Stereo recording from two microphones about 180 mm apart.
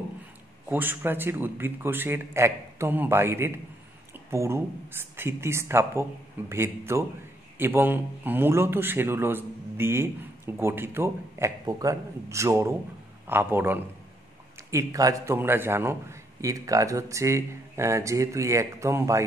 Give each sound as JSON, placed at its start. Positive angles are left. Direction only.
{"t": 0.7, "sound": "a man's voice", "side_deg": -10}